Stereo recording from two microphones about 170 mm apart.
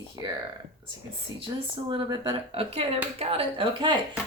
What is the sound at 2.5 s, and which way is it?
Speech, 35° right (ahead or behind).